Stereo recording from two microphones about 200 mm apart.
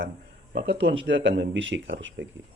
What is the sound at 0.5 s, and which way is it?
Speech, 60° right (ahead or behind).